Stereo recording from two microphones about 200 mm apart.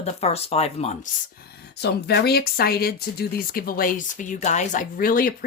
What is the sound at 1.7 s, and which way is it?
Speech, 55° left (ahead or behind).